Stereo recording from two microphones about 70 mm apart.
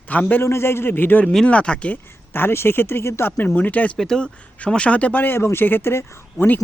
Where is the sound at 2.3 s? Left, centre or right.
Left.